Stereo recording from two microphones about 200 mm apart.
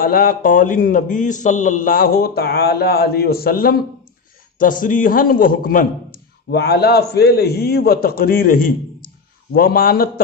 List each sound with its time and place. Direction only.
0.0 s a man's voice: 45° left (ahead or behind)
6.5 s a man's voice: 55° left (ahead or behind)